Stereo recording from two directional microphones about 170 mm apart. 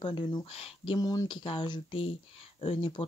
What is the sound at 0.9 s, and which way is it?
Speech, 20° left (ahead or behind).